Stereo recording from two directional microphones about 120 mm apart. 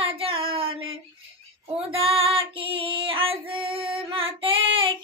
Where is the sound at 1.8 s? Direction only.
50° right (ahead or behind).